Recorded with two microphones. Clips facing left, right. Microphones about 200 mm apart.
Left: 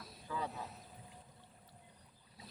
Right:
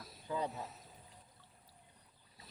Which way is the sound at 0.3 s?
20° right (ahead or behind).